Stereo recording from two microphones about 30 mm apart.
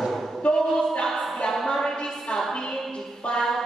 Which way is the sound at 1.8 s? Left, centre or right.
Centre.